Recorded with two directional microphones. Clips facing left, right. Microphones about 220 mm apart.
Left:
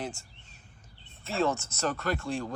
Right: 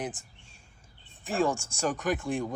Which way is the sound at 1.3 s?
15° right (ahead or behind).